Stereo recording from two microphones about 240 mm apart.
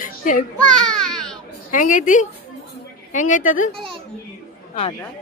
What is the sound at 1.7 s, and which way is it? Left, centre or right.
Speech, left.